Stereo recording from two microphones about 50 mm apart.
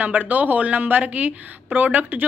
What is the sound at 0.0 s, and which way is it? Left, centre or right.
A woman's voice, right.